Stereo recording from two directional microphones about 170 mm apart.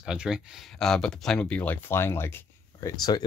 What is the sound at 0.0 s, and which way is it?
A man's voice, 5° right (ahead or behind).